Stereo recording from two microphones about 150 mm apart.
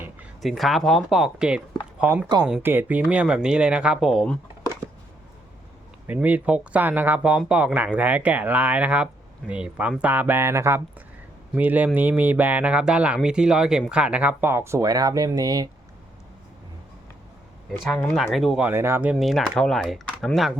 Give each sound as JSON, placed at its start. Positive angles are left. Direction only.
{"t": 0.4, "sound": "speech", "side_deg": 0}
{"t": 6.1, "sound": "speech", "side_deg": -10}
{"t": 17.8, "sound": "speech", "side_deg": 5}
{"t": 18.6, "sound": "speech", "side_deg": -15}
{"t": 19.1, "sound": "speech", "side_deg": 0}